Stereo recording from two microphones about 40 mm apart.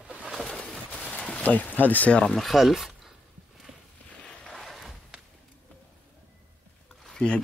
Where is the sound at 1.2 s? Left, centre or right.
Left.